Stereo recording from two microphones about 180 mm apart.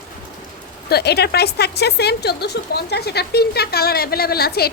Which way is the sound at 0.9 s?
65° left (ahead or behind).